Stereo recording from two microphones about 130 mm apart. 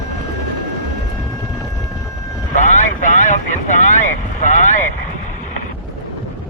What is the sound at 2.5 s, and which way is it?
Vehicle, 70° left (ahead or behind).